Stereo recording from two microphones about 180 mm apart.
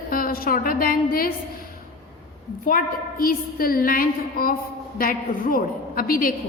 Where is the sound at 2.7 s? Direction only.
50° left (ahead or behind).